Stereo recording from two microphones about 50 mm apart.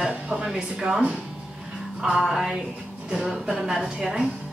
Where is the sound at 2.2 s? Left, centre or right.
Centre.